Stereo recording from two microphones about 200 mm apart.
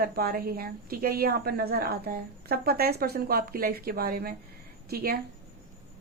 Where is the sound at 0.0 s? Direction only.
50° right (ahead or behind).